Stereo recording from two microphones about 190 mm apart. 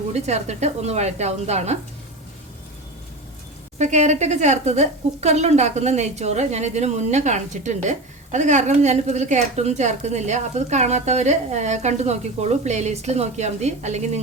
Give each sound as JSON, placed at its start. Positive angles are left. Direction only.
{"t": 0.1, "sound": "speech", "side_deg": -35}
{"t": 3.8, "sound": "speech", "side_deg": -40}